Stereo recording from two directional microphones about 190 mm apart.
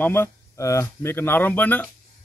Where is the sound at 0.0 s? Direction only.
15° left (ahead or behind).